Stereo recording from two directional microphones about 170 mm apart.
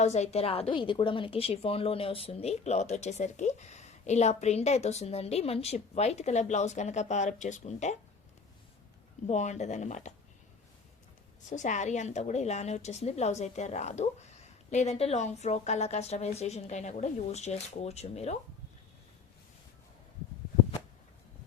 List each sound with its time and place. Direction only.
0.0 s a woman's voice: 40° left (ahead or behind)
9.2 s speech: 40° left (ahead or behind)
11.4 s a woman's voice: 45° left (ahead or behind)